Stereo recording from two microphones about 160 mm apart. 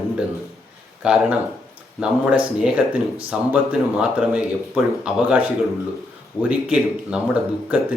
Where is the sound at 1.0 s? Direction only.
5° right (ahead or behind).